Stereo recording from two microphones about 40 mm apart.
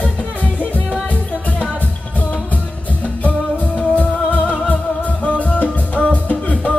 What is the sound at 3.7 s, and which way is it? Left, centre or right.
Music, left.